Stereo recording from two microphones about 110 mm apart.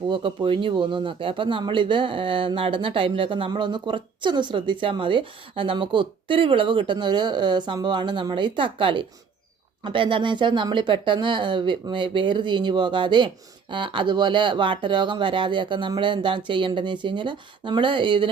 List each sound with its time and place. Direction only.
0.1 s speech: 50° right (ahead or behind)